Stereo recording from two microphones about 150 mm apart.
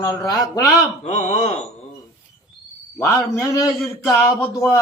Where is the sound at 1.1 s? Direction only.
50° left (ahead or behind).